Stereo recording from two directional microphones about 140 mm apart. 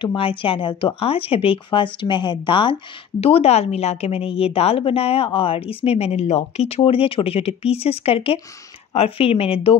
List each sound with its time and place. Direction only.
0.0 s speech: 40° left (ahead or behind)